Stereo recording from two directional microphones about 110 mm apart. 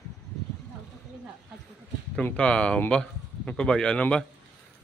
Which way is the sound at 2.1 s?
10° left (ahead or behind).